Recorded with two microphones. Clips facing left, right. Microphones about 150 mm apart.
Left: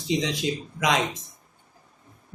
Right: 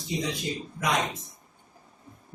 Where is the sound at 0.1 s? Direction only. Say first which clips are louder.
Left 5 dB; 90° left.